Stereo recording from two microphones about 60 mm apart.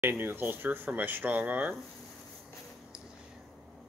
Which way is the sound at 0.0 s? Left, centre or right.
Right.